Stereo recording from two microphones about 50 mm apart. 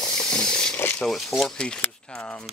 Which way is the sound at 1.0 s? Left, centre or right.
Centre.